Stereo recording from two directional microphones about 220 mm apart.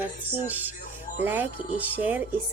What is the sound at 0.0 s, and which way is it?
Speech, 10° right (ahead or behind).